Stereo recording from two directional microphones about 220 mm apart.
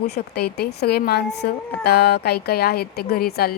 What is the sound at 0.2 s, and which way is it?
A woman's voice, 40° left (ahead or behind).